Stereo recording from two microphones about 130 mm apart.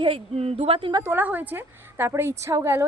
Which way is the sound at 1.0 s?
15° right (ahead or behind).